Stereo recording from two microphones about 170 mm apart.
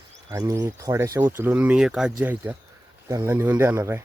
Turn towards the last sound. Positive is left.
turn(degrees=-15)  # may be behind; listen again after turning